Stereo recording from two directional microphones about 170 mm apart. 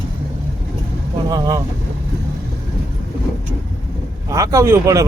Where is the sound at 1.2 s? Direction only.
20° right (ahead or behind).